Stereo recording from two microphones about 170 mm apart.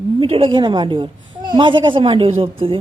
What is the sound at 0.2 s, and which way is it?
A woman's voice, 35° right (ahead or behind).